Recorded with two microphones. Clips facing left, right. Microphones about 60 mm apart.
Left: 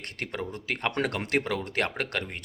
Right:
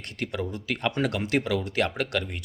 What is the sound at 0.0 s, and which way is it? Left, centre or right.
Speech, left.